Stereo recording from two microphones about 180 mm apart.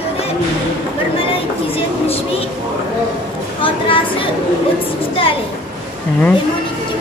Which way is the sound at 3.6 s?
30° left (ahead or behind).